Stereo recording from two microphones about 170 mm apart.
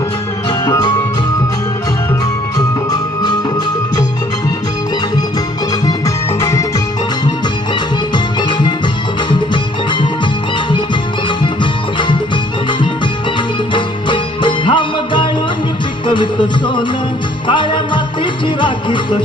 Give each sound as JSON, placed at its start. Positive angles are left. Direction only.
{"t": 0.6, "sound": "music", "side_deg": 20}
{"t": 6.4, "sound": "music", "side_deg": 20}
{"t": 8.1, "sound": "music", "side_deg": 25}
{"t": 11.3, "sound": "music", "side_deg": 30}
{"t": 13.7, "sound": "music", "side_deg": 30}